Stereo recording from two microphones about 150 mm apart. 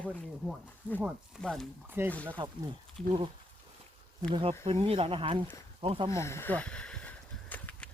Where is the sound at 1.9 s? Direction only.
15° right (ahead or behind).